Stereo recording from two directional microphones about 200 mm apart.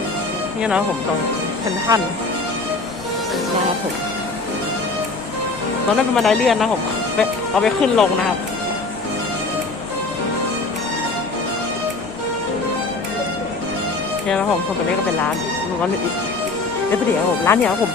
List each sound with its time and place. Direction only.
6.0 s speech: centre (ahead or behind)
17.5 s speech: 10° left (ahead or behind)